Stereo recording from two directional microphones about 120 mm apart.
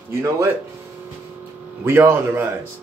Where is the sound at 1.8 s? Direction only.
20° right (ahead or behind).